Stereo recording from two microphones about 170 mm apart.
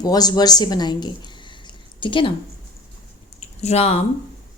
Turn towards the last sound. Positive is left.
turn(degrees=40)  # may be behind; listen again after turning